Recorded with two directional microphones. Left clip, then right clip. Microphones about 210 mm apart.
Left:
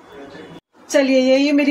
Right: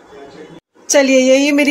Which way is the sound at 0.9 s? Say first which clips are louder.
Right 4 dB; 50° right (ahead or behind).